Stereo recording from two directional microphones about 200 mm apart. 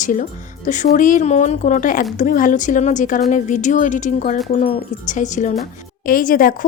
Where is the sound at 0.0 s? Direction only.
40° left (ahead or behind).